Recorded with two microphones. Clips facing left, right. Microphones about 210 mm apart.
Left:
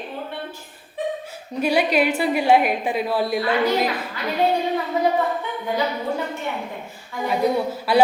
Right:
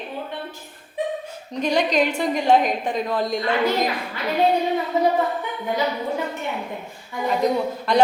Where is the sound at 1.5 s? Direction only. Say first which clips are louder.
Left 1 dB; 10° left (ahead or behind).